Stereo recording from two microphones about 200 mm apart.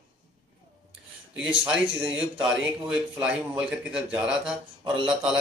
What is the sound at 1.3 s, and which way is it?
Speech, 5° right (ahead or behind).